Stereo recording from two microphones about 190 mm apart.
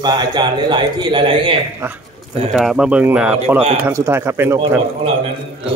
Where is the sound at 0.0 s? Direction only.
20° right (ahead or behind).